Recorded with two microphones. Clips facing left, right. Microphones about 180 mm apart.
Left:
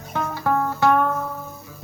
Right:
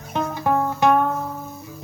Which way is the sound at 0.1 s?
20° right (ahead or behind).